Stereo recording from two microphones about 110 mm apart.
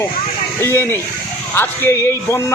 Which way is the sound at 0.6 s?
20° left (ahead or behind).